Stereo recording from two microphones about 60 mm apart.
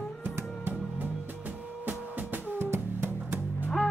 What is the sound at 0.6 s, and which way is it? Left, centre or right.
Music, right.